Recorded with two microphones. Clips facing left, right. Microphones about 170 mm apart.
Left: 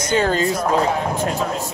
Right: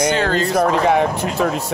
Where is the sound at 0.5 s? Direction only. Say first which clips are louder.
Right 4 dB; 70° right (ahead or behind).